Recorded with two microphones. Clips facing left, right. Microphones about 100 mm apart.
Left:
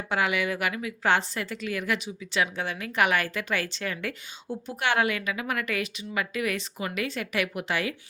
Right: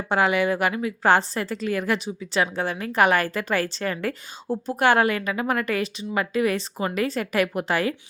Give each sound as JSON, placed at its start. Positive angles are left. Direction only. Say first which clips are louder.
{"t": 0.1, "sound": "a woman's voice", "louder": "right 6 dB", "side_deg": -35}